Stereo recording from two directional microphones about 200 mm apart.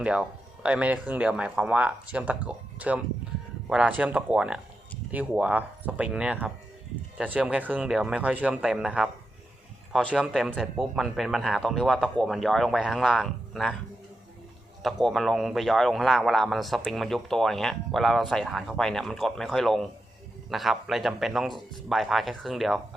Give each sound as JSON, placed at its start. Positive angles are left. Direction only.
{"t": 0.0, "sound": "speech", "side_deg": -5}
{"t": 14.8, "sound": "speech", "side_deg": 0}